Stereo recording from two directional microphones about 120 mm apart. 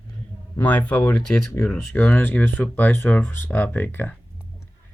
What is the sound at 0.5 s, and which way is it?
Speech, 15° left (ahead or behind).